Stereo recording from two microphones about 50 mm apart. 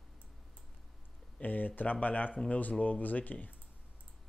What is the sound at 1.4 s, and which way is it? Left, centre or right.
Speech, left.